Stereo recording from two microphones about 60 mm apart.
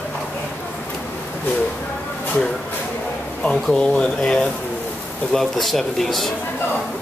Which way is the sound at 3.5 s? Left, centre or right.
Centre.